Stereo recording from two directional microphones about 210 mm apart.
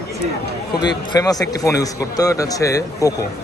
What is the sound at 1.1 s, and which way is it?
A man's voice, 15° left (ahead or behind).